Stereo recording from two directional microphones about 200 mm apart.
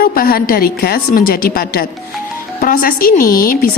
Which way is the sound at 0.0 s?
45° left (ahead or behind).